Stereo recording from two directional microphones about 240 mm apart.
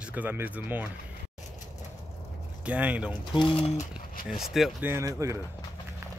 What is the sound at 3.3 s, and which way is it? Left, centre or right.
Speech, left.